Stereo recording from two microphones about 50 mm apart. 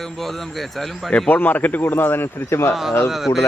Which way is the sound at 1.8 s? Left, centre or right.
Left.